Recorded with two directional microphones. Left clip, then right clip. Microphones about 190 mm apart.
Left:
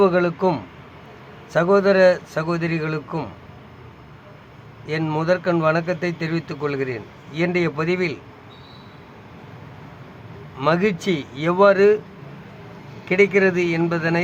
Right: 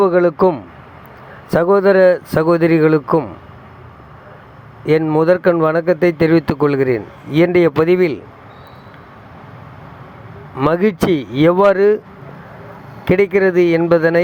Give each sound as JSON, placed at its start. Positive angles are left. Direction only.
{"t": 0.0, "sound": "speech", "side_deg": -40}
{"t": 1.5, "sound": "speech", "side_deg": -45}
{"t": 5.2, "sound": "speech", "side_deg": -45}
{"t": 10.7, "sound": "speech", "side_deg": -45}
{"t": 13.1, "sound": "speech", "side_deg": -45}